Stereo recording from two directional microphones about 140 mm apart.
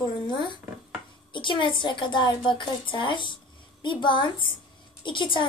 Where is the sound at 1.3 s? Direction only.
35° left (ahead or behind).